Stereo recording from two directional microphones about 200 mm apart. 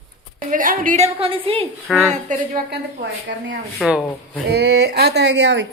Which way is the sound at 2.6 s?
55° right (ahead or behind).